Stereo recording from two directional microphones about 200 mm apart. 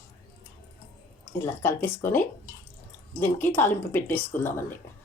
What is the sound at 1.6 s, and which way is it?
Speech, 10° left (ahead or behind).